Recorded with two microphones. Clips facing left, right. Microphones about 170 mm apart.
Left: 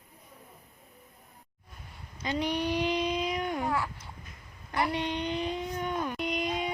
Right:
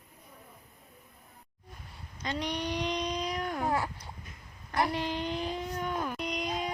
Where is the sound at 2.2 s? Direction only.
5° left (ahead or behind).